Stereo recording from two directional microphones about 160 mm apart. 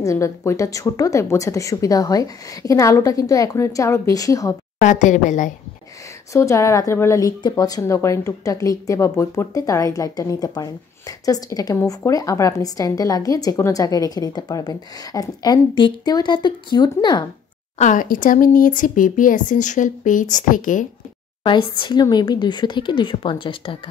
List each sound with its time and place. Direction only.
0.0 s a woman's voice: 20° left (ahead or behind)
4.7 s a woman's voice: 50° left (ahead or behind)
6.3 s a woman's voice: 20° left (ahead or behind)
17.7 s speech: 50° left (ahead or behind)
21.5 s a woman's voice: 30° left (ahead or behind)